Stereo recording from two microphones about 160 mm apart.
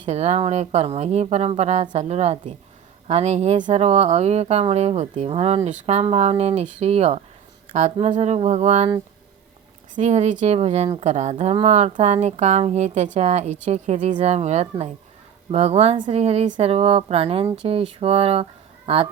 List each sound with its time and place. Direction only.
0.0 s a woman's voice: 40° right (ahead or behind)
9.9 s a woman's voice: 45° right (ahead or behind)